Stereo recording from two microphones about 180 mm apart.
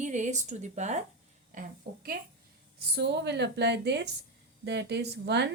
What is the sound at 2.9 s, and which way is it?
Speech, 70° right (ahead or behind).